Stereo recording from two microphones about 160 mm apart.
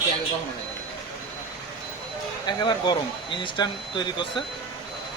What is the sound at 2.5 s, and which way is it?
Speech, 25° left (ahead or behind).